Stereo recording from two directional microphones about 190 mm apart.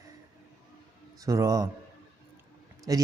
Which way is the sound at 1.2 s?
15° right (ahead or behind).